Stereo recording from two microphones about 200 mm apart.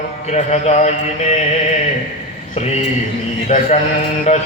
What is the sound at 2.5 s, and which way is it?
Speech, 35° left (ahead or behind).